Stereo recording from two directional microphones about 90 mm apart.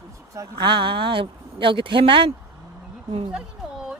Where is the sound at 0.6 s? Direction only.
65° right (ahead or behind).